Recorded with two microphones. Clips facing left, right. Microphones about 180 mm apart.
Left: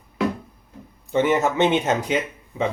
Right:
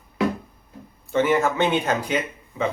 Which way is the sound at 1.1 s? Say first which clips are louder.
Left 1 dB; 20° left (ahead or behind).